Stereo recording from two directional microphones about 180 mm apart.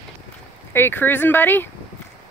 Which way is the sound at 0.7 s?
10° left (ahead or behind).